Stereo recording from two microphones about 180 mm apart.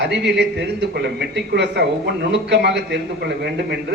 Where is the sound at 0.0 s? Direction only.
75° right (ahead or behind).